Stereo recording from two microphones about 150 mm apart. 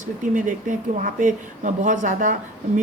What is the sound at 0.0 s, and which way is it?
A woman's voice, 60° right (ahead or behind).